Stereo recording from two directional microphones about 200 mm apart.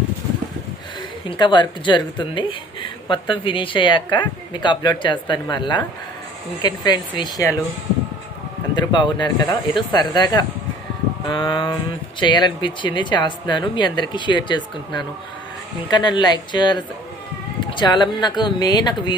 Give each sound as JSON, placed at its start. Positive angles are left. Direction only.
{"t": 1.2, "sound": "speech", "side_deg": 25}
{"t": 8.7, "sound": "speech", "side_deg": 20}